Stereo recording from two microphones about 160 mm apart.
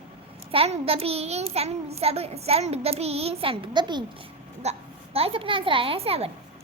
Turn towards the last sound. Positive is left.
turn(degrees=-35)  # may be behind; listen again after turning